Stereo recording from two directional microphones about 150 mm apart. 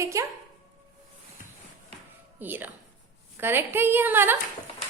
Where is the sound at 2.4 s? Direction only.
15° right (ahead or behind).